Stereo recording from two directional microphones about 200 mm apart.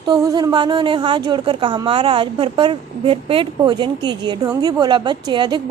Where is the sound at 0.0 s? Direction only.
20° right (ahead or behind).